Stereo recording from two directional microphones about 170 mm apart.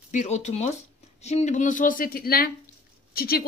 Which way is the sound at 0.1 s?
45° left (ahead or behind).